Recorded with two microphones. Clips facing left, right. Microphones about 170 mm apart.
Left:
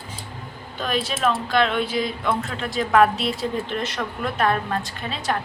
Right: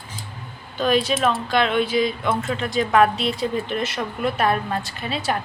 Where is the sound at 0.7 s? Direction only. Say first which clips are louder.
Right 6 dB; centre (ahead or behind).